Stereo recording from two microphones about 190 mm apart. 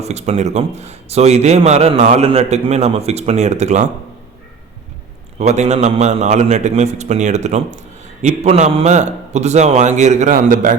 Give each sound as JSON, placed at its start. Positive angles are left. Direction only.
{"t": 0.0, "sound": "a man's voice", "side_deg": -35}
{"t": 5.4, "sound": "a man's voice", "side_deg": -35}